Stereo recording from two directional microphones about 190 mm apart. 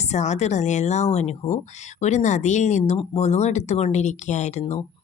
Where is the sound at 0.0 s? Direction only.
35° left (ahead or behind).